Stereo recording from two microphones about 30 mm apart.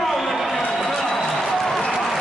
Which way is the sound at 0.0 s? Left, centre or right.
Centre.